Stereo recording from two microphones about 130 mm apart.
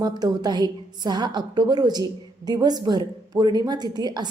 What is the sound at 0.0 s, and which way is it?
A woman's voice, 30° right (ahead or behind).